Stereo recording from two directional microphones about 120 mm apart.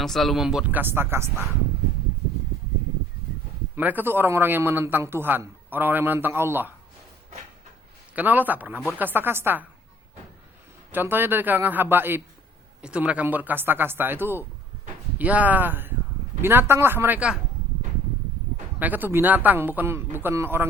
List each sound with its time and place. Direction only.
0.0 s speech: centre (ahead or behind)
0.8 s speech: 20° right (ahead or behind)
3.8 s a man's voice: 15° right (ahead or behind)
8.1 s a man's voice: 15° right (ahead or behind)
10.9 s a man's voice: 15° right (ahead or behind)
18.8 s a man's voice: 15° right (ahead or behind)